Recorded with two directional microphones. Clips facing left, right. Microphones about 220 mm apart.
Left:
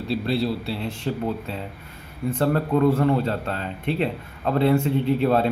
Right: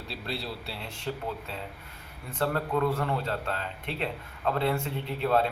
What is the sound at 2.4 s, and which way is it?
Speech, 25° left (ahead or behind).